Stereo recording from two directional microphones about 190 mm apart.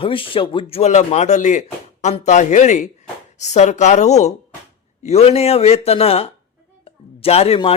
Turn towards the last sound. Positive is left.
turn(degrees=30)  # may be behind; listen again after turning